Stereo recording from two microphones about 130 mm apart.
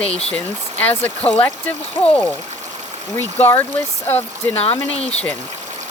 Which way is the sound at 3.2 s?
15° left (ahead or behind).